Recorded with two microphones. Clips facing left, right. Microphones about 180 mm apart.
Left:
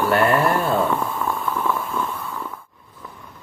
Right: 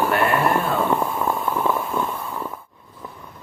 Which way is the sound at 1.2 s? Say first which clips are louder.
Right 2 dB; 25° right (ahead or behind).